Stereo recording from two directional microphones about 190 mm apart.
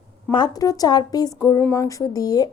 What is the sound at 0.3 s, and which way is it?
A woman's voice, 20° left (ahead or behind).